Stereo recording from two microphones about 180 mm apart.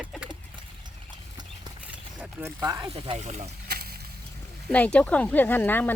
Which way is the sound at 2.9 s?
30° right (ahead or behind).